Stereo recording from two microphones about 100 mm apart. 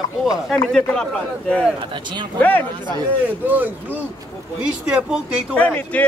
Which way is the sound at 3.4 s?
20° right (ahead or behind).